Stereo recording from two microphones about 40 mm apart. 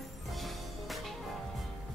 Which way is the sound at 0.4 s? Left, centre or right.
Centre.